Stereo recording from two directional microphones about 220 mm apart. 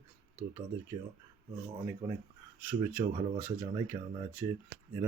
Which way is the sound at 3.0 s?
25° right (ahead or behind).